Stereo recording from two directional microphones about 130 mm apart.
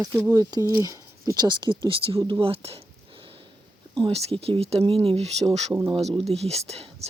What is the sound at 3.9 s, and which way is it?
Speech, 45° right (ahead or behind).